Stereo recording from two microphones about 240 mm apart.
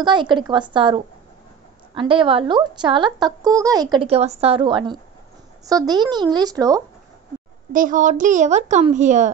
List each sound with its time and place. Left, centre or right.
0.0 s a woman's voice: centre
7.7 s speech: right